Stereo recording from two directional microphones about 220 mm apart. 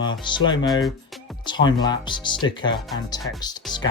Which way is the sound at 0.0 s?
20° left (ahead or behind).